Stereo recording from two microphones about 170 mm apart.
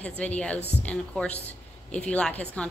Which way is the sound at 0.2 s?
10° left (ahead or behind).